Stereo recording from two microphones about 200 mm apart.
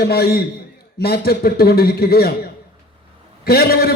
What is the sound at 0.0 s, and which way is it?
A man's voice, 50° left (ahead or behind).